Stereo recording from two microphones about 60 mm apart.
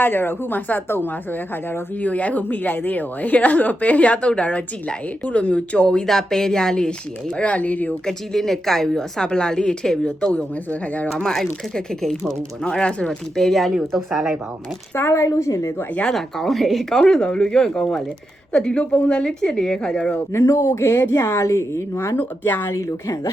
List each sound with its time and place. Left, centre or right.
0.0 s a woman's voice: left
8.0 s a woman's voice: centre
10.7 s a woman's voice: left
11.2 s a woman's voice: centre
14.9 s speech: left
15.3 s a woman's voice: left
16.0 s a woman's voice: centre
20.3 s speech: left
22.2 s speech: left
22.7 s a woman's voice: left